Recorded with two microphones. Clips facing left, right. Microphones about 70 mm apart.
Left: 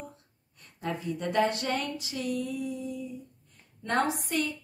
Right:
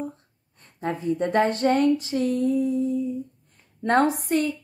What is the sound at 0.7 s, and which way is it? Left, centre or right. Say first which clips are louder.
A woman's voice: right 8 dB; right.